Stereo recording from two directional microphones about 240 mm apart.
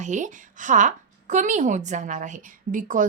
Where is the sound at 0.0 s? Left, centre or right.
Right.